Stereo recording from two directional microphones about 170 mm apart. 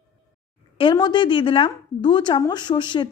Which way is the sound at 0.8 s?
25° left (ahead or behind).